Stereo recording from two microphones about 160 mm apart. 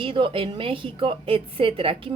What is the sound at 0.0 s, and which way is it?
Speech, 35° right (ahead or behind).